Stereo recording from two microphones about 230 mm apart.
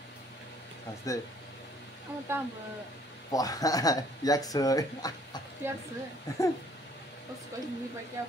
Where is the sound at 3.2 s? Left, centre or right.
Centre.